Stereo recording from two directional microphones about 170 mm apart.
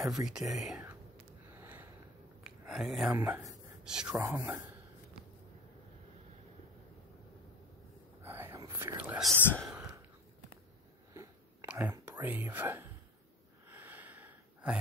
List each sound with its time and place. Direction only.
0.0 s speech: 5° right (ahead or behind)
1.6 s sniff: 10° right (ahead or behind)
2.4 s a sound: 5° right (ahead or behind)
3.2 s speech: 10° right (ahead or behind)
3.4 s a sound: 5° right (ahead or behind)
4.1 s speech: 15° right (ahead or behind)
8.2 s whispering: 15° right (ahead or behind)
11.1 s whispering: 10° right (ahead or behind)
13.7 s a sound: 10° right (ahead or behind)